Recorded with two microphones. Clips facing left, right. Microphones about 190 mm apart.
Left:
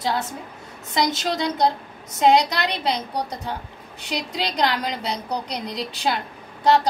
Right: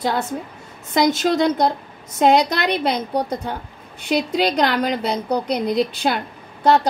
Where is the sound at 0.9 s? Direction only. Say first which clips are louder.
Right 6 dB; 50° right (ahead or behind).